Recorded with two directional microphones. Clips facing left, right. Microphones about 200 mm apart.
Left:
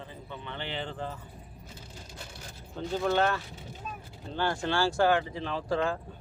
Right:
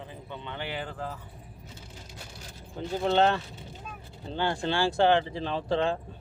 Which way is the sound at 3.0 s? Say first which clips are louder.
Right 4 dB; 25° right (ahead or behind).